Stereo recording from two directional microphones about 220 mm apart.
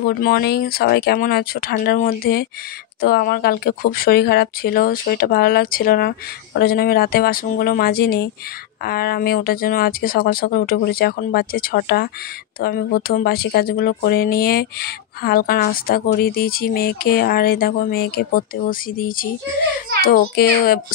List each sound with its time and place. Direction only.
0.0 s a child's voice: 45° left (ahead or behind)